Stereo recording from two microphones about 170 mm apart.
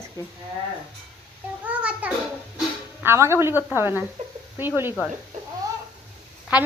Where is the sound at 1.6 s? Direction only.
10° right (ahead or behind).